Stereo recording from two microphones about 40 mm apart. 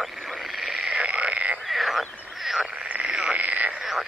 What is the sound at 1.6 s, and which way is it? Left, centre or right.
Frog, centre.